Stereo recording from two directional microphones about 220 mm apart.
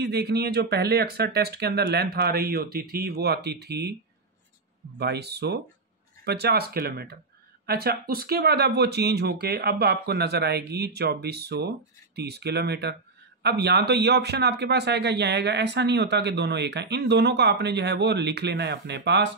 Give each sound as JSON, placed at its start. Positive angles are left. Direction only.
{"t": 0.0, "sound": "speech", "side_deg": -50}
{"t": 4.9, "sound": "speech", "side_deg": -50}